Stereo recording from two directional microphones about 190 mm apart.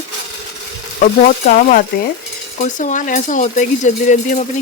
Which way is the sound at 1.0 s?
45° left (ahead or behind).